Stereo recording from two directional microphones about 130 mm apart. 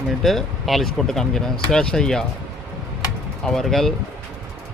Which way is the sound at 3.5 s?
5° left (ahead or behind).